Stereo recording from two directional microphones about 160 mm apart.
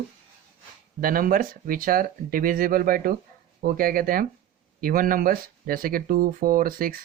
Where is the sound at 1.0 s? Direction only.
60° right (ahead or behind).